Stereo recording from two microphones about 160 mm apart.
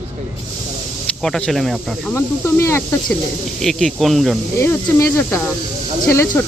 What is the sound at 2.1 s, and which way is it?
Speech, 20° left (ahead or behind).